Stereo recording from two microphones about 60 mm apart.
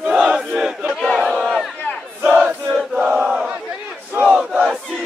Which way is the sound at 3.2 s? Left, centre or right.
Centre.